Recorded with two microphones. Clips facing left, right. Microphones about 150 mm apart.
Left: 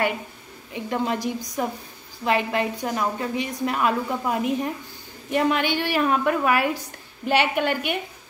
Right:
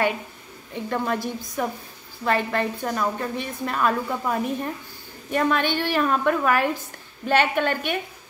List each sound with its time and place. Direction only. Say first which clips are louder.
0.7 s a woman's voice: even; 20° left (ahead or behind)